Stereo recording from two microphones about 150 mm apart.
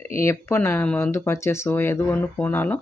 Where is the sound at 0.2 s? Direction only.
15° left (ahead or behind).